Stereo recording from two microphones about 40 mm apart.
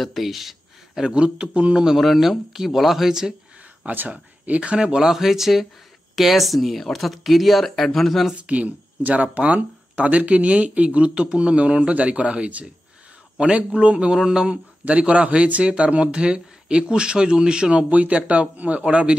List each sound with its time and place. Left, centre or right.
0.0 s speech: centre
1.0 s speech: right
2.0 s speech: centre
4.1 s speech: right
4.8 s speech: centre
8.5 s speech: right
14.1 s speech: centre
14.9 s speech: right
18.2 s speech: right